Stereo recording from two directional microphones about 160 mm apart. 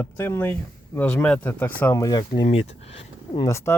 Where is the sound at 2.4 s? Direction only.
45° left (ahead or behind).